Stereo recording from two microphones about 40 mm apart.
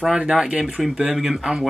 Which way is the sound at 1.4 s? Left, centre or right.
Centre.